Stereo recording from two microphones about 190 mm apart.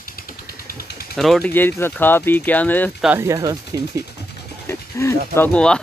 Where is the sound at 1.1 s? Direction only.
Centre (ahead or behind).